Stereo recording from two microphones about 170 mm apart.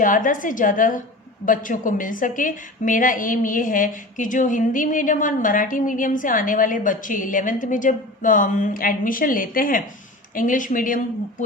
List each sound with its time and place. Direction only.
0.0 s a woman's voice: 50° left (ahead or behind)